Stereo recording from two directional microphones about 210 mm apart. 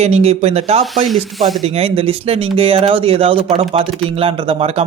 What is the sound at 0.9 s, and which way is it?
Speech, centre (ahead or behind).